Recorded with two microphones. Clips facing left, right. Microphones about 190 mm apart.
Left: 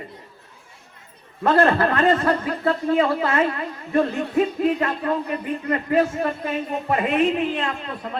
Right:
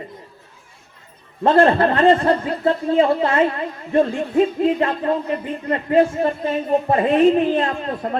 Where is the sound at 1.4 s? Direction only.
30° right (ahead or behind); by 8.1 s 45° right (ahead or behind).